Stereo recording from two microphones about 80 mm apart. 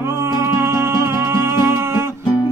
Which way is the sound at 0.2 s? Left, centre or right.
Right.